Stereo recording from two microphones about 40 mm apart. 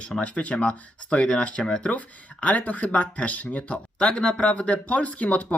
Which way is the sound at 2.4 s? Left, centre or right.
Left.